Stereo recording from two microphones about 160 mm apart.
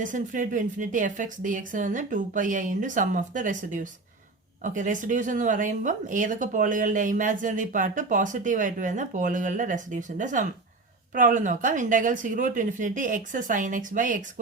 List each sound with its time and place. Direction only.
0.0 s speech: 55° right (ahead or behind)